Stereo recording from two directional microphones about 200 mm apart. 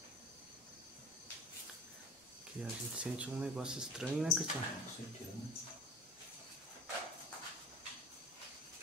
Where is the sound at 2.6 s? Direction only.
5° right (ahead or behind).